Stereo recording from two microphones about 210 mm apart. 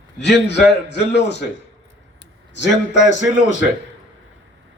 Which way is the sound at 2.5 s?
60° left (ahead or behind).